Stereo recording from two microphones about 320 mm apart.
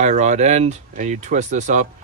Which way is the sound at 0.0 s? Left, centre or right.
Right.